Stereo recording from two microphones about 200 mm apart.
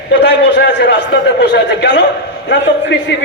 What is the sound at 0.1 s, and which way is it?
A man's voice, 60° left (ahead or behind).